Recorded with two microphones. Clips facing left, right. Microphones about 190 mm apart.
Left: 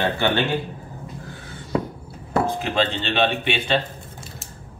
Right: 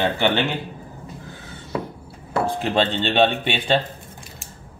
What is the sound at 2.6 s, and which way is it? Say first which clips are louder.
Speech: right 2 dB; 35° right (ahead or behind).